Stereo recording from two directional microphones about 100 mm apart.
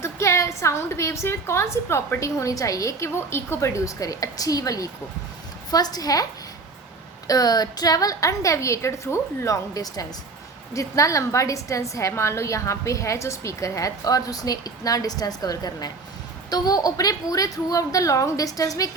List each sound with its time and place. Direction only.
0.0 s a woman's voice: 30° left (ahead or behind)
7.3 s a woman's voice: 40° left (ahead or behind)